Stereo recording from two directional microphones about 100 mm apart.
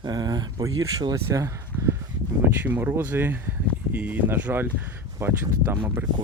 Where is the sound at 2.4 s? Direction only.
20° right (ahead or behind).